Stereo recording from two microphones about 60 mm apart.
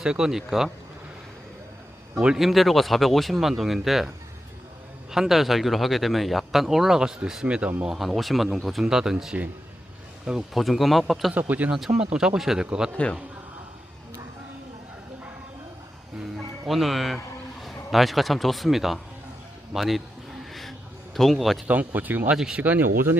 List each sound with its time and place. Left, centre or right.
0.0 s speech: centre
2.2 s speech: centre
5.1 s speech: centre
7.9 s speech: centre
10.5 s speech: centre
11.3 s speech: right
11.9 s speech: centre
16.2 s music: centre
17.6 s a man's voice: centre
20.5 s a sound: centre
21.7 s speech: right